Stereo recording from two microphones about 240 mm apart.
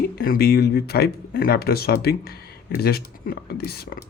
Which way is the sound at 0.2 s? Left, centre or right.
Left.